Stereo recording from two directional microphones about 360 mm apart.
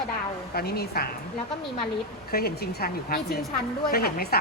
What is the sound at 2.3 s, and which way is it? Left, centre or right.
A woman's voice, left.